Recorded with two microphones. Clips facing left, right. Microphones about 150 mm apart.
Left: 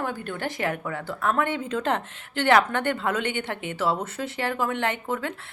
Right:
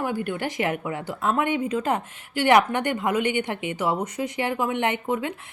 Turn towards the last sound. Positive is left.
turn(degrees=-15)  # may be behind; listen again after turning